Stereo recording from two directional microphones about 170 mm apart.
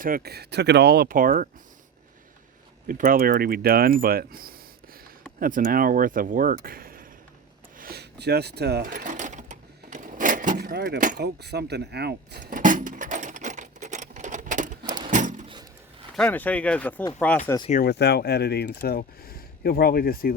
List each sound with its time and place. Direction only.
0.0 s speech: 60° right (ahead or behind)
2.8 s speech: 55° right (ahead or behind); by 8.8 s 75° right (ahead or behind)
8.8 s sewing machine: 50° right (ahead or behind)
10.6 s speech: 65° right (ahead or behind)
11.2 s speech: 75° right (ahead or behind)
12.4 s a sound: 50° right (ahead or behind)
16.1 s speech: 10° left (ahead or behind)
17.4 s speech: 30° left (ahead or behind)
17.8 s speech: 75° left (ahead or behind)